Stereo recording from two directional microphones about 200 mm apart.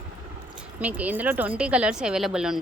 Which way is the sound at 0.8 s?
5° right (ahead or behind).